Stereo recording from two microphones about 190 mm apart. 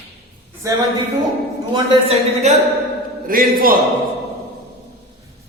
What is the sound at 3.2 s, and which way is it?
Speech, 50° right (ahead or behind).